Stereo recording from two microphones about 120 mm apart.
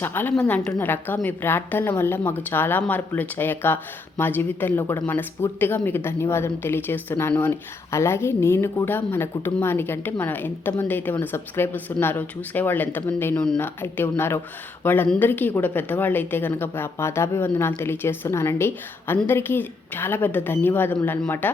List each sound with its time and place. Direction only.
0.0 s speech: 15° left (ahead or behind)